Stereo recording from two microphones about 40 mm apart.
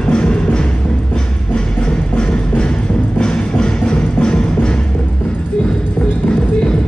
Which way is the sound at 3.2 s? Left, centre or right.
Left.